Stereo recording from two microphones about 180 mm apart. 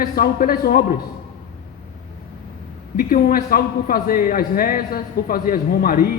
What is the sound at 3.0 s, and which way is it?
A man's voice, 55° left (ahead or behind).